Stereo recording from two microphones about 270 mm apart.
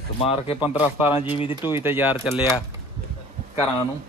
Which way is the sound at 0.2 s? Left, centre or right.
Left.